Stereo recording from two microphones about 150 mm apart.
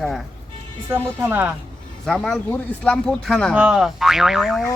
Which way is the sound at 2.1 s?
5° left (ahead or behind).